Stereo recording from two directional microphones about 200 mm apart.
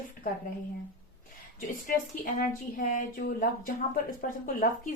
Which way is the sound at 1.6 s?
40° left (ahead or behind).